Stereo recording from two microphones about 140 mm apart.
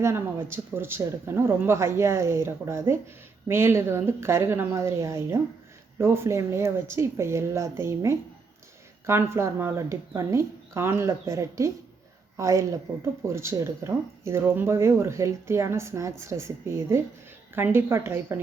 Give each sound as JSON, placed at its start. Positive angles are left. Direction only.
{"t": 0.0, "sound": "speech", "side_deg": -20}